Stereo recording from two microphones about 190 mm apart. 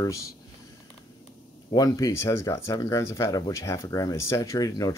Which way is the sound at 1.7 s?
20° left (ahead or behind).